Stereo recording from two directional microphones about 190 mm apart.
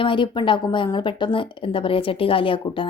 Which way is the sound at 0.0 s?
25° left (ahead or behind).